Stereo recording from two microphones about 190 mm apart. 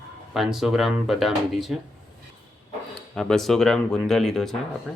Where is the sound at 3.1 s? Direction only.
Centre (ahead or behind).